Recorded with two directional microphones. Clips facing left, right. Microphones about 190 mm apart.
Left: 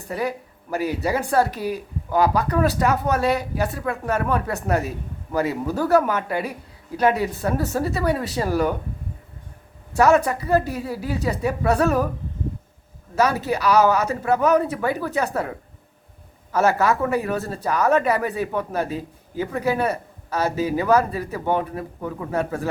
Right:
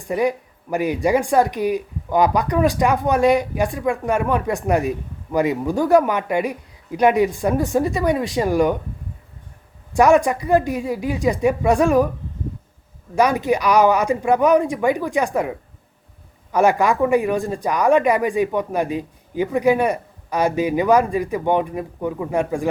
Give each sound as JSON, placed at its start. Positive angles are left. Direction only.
{"t": 0.1, "sound": "speech", "side_deg": -15}
{"t": 9.9, "sound": "speech", "side_deg": -15}
{"t": 13.1, "sound": "speech", "side_deg": -15}